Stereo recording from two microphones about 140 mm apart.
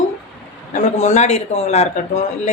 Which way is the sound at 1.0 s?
55° left (ahead or behind).